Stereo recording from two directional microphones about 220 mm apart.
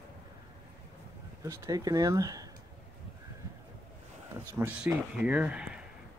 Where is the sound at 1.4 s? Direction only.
15° right (ahead or behind).